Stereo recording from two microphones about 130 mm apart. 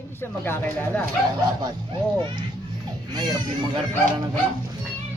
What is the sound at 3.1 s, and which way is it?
Speech, 30° right (ahead or behind).